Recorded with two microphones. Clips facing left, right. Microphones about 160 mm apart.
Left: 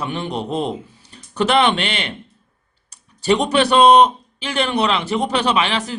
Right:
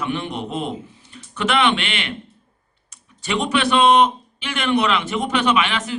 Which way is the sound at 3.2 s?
40° left (ahead or behind).